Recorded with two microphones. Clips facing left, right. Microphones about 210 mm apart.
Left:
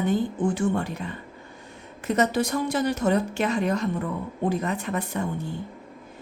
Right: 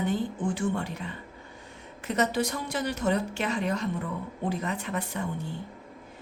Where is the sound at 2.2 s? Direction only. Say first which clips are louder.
Left 4 dB; 45° left (ahead or behind).